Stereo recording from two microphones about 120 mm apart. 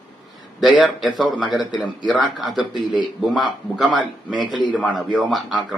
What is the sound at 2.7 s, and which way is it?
Speech, 40° left (ahead or behind).